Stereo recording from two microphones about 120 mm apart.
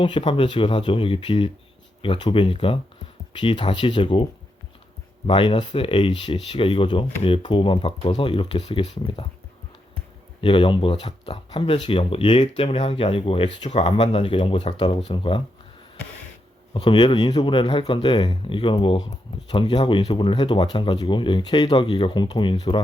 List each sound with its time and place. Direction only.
0.0 s speech: 45° left (ahead or behind)
10.4 s speech: 45° left (ahead or behind)
12.7 s speech: 60° left (ahead or behind); by 15.4 s 45° left (ahead or behind)
16.7 s speech: 40° left (ahead or behind)